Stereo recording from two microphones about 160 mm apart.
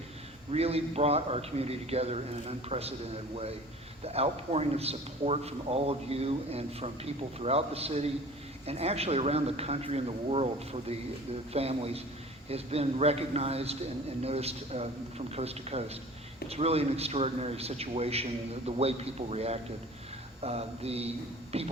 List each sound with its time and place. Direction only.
0.5 s a man's voice: 40° right (ahead or behind)
4.0 s a man's voice: 40° right (ahead or behind)